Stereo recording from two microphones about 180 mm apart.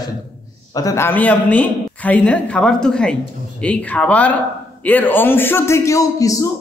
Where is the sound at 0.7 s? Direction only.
15° left (ahead or behind).